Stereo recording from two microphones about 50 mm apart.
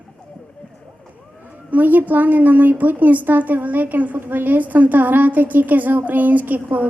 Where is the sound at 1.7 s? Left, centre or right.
Right.